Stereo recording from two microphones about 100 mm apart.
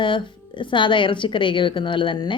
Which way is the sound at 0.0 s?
55° left (ahead or behind).